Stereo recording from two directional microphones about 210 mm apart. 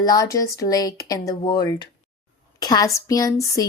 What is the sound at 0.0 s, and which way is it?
A woman's voice, 15° left (ahead or behind).